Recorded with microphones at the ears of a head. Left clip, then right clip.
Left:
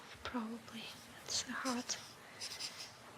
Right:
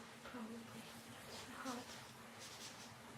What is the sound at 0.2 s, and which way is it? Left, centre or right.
Speech, left.